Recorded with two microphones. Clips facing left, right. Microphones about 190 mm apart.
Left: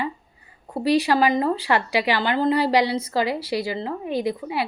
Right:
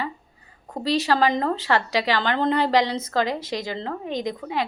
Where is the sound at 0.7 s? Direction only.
10° left (ahead or behind).